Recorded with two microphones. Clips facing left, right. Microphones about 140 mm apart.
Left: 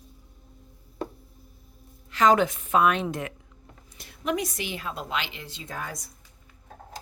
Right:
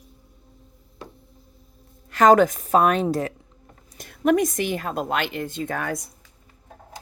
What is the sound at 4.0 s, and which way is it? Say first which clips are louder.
A woman's voice: right 9 dB; 50° right (ahead or behind).